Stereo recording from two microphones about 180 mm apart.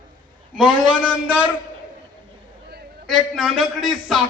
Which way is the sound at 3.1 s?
Centre (ahead or behind).